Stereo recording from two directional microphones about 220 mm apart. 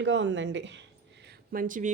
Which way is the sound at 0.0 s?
55° right (ahead or behind).